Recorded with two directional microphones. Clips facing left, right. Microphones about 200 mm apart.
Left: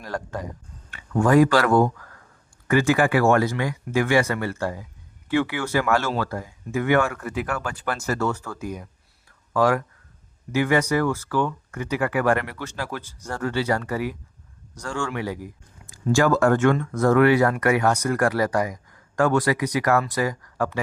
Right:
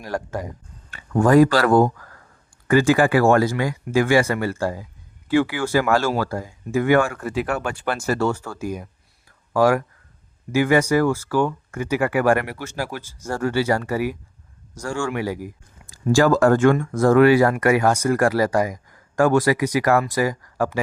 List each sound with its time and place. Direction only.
0.0 s speech: 25° right (ahead or behind)
0.9 s speech: 35° right (ahead or behind)